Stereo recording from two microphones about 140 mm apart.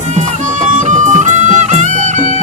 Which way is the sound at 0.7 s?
65° right (ahead or behind).